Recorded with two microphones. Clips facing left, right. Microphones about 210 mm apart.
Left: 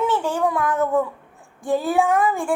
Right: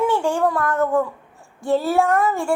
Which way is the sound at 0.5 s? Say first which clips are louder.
Even; 15° left (ahead or behind).